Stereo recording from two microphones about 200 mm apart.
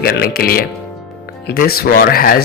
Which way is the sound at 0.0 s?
50° left (ahead or behind).